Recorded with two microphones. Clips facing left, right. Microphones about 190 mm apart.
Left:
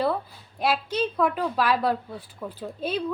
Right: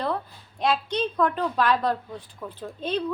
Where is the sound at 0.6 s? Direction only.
5° left (ahead or behind).